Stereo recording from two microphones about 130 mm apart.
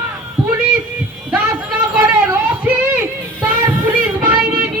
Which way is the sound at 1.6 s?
10° right (ahead or behind).